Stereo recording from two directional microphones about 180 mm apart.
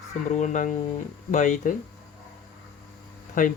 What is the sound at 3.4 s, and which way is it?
Speech, 45° left (ahead or behind).